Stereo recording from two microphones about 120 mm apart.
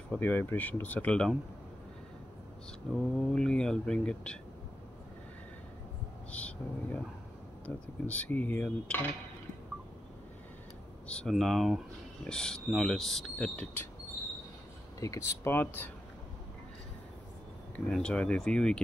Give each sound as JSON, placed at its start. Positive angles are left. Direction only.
{"t": 0.1, "sound": "speech", "side_deg": 15}
{"t": 2.9, "sound": "speech", "side_deg": 0}
{"t": 6.3, "sound": "speech", "side_deg": 10}
{"t": 11.1, "sound": "speech", "side_deg": 5}
{"t": 15.0, "sound": "speech", "side_deg": 25}
{"t": 17.7, "sound": "speech", "side_deg": 5}